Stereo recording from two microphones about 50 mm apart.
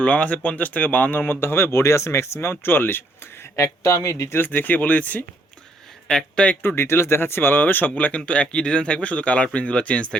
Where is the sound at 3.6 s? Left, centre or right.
Left.